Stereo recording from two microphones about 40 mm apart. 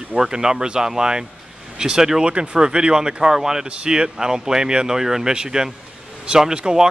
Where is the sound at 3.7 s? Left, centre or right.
Right.